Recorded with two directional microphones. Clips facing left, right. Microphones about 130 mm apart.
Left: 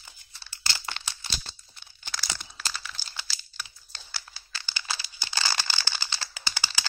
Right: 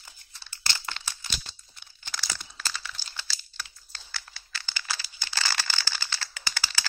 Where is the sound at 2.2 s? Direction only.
10° left (ahead or behind).